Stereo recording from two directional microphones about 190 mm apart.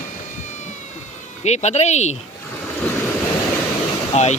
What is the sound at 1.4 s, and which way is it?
Speech, 35° left (ahead or behind).